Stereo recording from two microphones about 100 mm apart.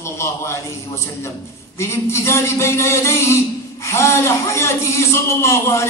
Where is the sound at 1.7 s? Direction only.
25° left (ahead or behind).